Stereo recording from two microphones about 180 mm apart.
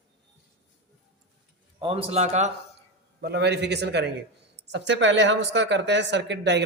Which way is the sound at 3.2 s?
65° right (ahead or behind).